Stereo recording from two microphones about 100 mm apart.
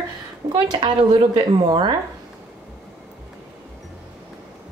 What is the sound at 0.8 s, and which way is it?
Speech, 45° right (ahead or behind).